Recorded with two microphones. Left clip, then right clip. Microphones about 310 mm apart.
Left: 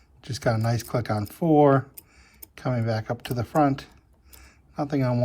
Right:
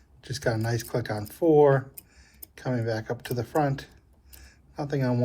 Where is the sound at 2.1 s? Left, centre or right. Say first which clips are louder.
Left 2 dB; left.